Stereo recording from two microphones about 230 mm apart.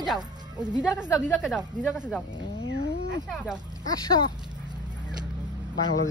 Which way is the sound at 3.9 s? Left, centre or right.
Centre.